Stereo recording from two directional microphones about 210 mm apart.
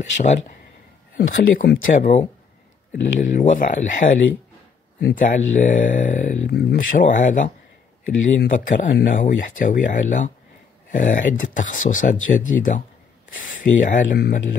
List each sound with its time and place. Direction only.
1.1 s speech: 45° left (ahead or behind)